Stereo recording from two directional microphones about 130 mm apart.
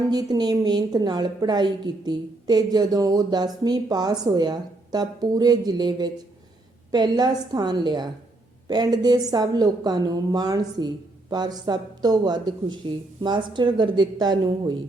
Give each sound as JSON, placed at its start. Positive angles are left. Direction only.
{"t": 0.0, "sound": "a woman's voice", "side_deg": -30}